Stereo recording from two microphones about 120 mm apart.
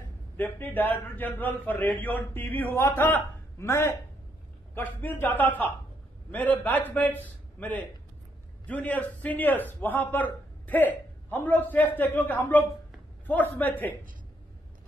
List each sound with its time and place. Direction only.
0.4 s a man's voice: 15° left (ahead or behind)